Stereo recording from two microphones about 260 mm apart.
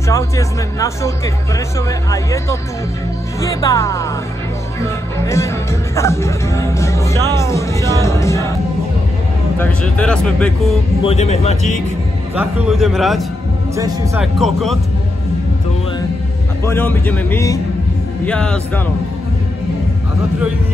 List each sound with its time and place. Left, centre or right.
0.1 s speech: centre
9.6 s speech: centre
11.1 s speech: left
12.4 s speech: centre
13.7 s speech: centre
14.2 s speech: centre
16.6 s speech: centre